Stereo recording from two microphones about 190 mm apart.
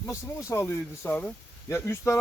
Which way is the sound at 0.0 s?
15° left (ahead or behind).